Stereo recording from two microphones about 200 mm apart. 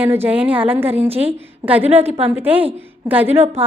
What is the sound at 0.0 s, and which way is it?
A woman's voice, 10° right (ahead or behind).